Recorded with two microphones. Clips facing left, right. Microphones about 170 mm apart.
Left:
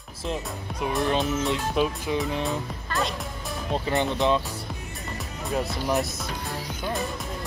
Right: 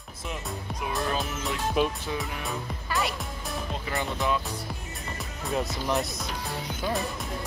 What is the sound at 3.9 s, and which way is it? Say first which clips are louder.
Speech: left 5 dB; 20° left (ahead or behind).